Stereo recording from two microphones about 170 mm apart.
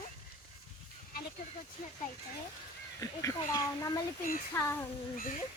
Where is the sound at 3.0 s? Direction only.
20° left (ahead or behind).